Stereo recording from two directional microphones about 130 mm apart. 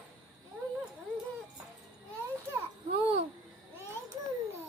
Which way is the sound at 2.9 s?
45° right (ahead or behind).